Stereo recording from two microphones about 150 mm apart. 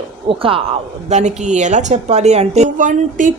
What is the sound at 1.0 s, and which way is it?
A woman's voice, 50° right (ahead or behind).